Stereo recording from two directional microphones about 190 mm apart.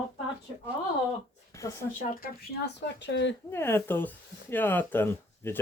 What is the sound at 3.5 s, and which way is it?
Speech, 10° left (ahead or behind).